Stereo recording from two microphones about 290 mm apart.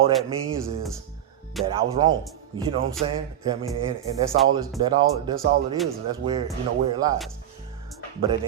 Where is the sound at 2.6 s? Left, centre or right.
Centre.